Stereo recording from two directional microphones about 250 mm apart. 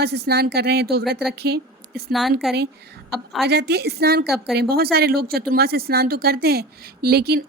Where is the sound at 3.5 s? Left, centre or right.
Right.